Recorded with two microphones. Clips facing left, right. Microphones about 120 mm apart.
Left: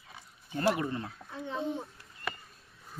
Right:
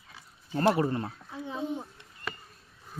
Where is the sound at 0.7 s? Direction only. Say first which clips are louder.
Right 4 dB; 35° right (ahead or behind).